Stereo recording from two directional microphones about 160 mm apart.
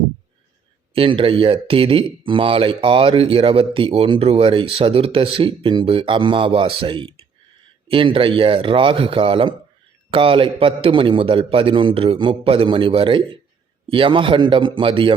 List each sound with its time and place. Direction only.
0.9 s speech: 35° right (ahead or behind)